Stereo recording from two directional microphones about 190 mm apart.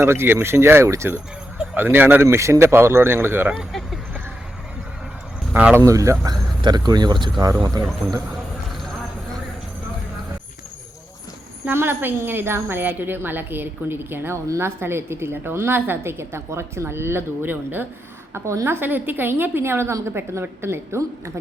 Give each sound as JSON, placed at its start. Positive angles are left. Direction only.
{"t": 0.0, "sound": "a woman's voice", "side_deg": -15}
{"t": 5.5, "sound": "speech", "side_deg": -10}
{"t": 11.6, "sound": "a woman's voice", "side_deg": -10}